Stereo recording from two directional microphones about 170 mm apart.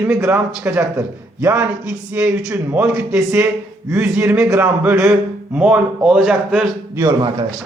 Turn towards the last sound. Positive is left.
turn(degrees=-25)  # may be behind; listen again after turning